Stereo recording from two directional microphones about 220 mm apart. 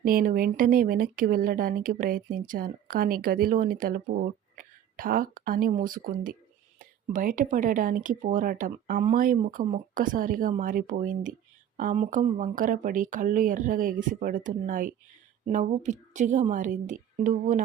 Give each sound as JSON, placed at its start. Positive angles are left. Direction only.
{"t": 0.0, "sound": "speech", "side_deg": -40}